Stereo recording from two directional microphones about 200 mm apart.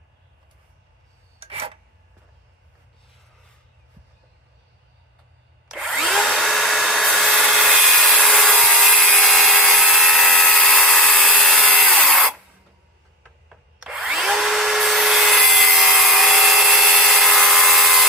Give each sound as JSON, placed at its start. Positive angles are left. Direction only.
{"t": 1.4, "sound": "rub", "side_deg": -30}
{"t": 5.6, "sound": "drill", "side_deg": 0}
{"t": 11.9, "sound": "tools", "side_deg": 5}
{"t": 13.7, "sound": "drill", "side_deg": 0}